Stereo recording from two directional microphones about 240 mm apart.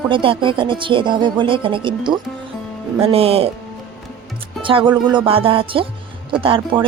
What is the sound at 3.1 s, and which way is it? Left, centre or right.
Speech, right.